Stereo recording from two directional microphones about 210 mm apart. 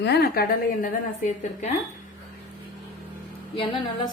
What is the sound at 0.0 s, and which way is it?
A woman's voice, 50° left (ahead or behind).